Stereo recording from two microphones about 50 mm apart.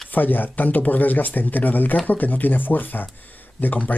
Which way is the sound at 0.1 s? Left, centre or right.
Left.